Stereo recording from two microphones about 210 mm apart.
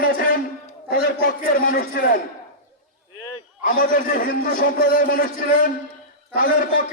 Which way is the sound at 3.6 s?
40° left (ahead or behind).